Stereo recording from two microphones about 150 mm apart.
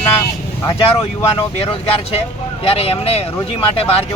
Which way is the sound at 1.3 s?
40° left (ahead or behind).